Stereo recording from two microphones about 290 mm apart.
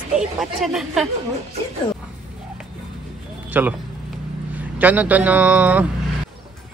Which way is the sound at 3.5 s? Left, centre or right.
Centre.